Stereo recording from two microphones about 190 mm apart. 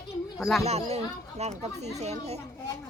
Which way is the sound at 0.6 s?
35° right (ahead or behind).